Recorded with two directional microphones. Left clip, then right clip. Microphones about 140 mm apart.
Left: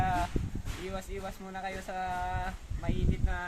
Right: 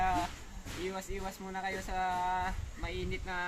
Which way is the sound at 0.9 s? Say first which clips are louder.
Left 1 dB; 15° left (ahead or behind).